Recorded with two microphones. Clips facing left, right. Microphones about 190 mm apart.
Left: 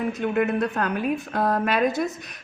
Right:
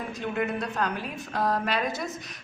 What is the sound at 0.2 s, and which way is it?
A woman's voice, 55° left (ahead or behind).